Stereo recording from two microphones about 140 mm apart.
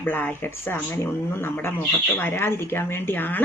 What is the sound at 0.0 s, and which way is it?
Speech, 15° left (ahead or behind).